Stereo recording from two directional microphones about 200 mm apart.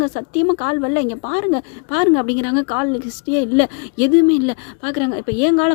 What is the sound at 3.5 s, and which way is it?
Speech, 40° left (ahead or behind).